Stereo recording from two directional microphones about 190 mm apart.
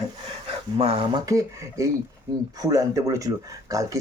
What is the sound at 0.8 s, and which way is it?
Speech, 30° right (ahead or behind).